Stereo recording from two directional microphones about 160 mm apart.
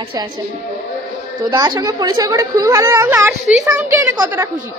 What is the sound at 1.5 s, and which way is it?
A woman's voice, 25° right (ahead or behind).